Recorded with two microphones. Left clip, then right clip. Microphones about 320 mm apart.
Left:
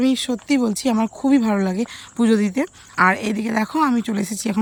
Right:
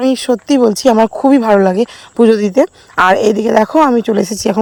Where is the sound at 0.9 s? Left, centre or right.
Right.